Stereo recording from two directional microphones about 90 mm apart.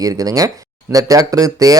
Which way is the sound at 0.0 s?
45° right (ahead or behind).